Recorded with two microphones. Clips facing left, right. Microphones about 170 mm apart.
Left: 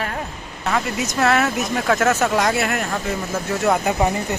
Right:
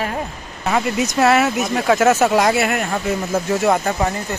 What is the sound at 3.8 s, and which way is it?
Speech, 15° left (ahead or behind).